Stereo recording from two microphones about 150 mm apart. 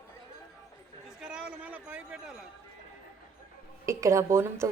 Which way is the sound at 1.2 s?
5° right (ahead or behind).